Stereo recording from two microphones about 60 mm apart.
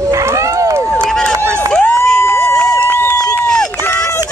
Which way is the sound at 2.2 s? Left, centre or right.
Left.